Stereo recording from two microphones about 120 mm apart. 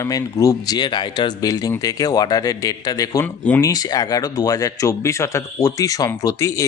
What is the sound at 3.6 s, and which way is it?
Speech, 30° left (ahead or behind).